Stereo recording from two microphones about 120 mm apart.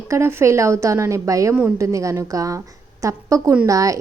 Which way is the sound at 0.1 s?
20° right (ahead or behind).